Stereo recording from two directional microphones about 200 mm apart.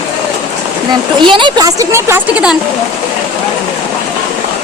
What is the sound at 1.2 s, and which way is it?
A woman's voice, 25° right (ahead or behind).